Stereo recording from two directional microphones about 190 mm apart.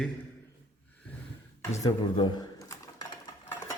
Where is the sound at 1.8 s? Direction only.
20° left (ahead or behind).